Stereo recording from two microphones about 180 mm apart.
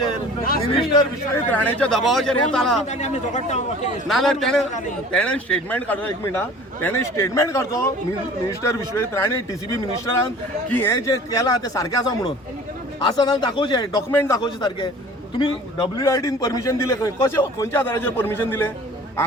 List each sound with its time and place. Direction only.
0.7 s speech: 30° left (ahead or behind)
1.5 s speech: 5° left (ahead or behind)
2.9 s speech: 40° left (ahead or behind)
4.1 s a man's voice: centre (ahead or behind); by 14.0 s 25° left (ahead or behind)
14.1 s a man's voice: 15° left (ahead or behind)